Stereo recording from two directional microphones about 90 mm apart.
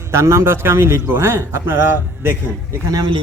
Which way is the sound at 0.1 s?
30° right (ahead or behind).